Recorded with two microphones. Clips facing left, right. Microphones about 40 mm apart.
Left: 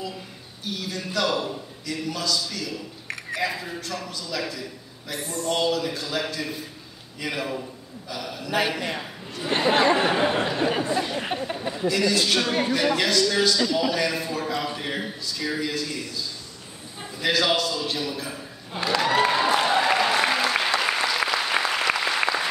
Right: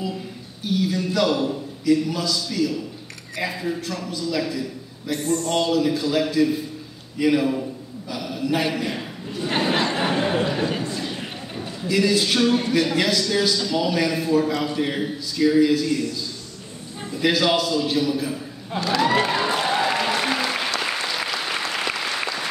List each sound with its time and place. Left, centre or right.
0.7 s a man's voice: centre
8.7 s a sound: centre
10.6 s a sound: centre
11.9 s a man's voice: centre
17.2 s a man's voice: centre
18.9 s applause: centre